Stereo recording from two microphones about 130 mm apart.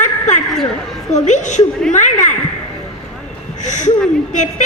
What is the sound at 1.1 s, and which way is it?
Speech, 65° left (ahead or behind).